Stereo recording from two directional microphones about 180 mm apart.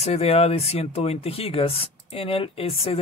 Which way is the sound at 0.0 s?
35° left (ahead or behind).